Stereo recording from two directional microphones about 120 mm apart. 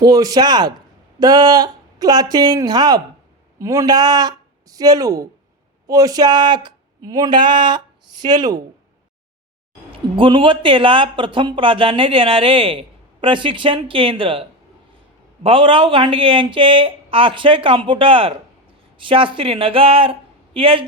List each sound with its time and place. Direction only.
0.0 s speech: 30° right (ahead or behind)
10.2 s speech: 45° right (ahead or behind)
15.4 s speech: 45° right (ahead or behind)